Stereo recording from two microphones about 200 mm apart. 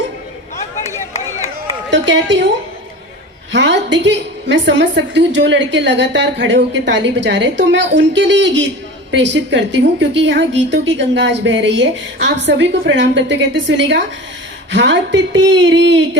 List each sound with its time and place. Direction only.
1.9 s a woman's voice: 65° right (ahead or behind)
3.5 s a woman's voice: 60° right (ahead or behind)